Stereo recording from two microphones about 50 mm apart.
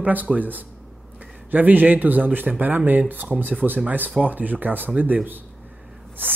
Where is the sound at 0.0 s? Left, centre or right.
Right.